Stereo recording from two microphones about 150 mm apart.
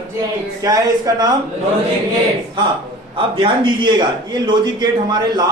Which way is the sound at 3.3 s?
35° right (ahead or behind).